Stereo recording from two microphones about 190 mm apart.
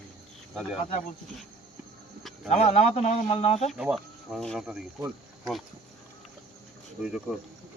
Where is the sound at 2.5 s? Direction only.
35° left (ahead or behind).